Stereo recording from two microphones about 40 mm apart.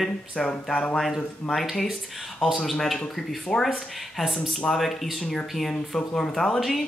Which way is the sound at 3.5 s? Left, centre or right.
Centre.